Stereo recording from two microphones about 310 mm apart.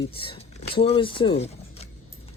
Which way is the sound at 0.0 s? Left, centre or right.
Centre.